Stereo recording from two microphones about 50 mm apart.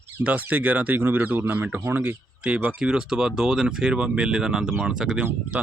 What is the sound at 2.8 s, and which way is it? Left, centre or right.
Speech, centre.